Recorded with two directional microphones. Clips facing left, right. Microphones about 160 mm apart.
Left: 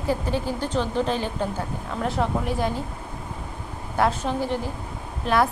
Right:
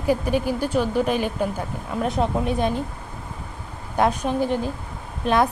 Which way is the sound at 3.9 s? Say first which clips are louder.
Right 2 dB; 20° right (ahead or behind).